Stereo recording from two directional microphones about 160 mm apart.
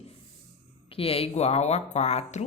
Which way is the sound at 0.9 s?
35° left (ahead or behind).